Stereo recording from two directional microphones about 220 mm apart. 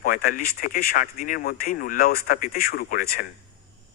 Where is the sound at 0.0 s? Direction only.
40° left (ahead or behind).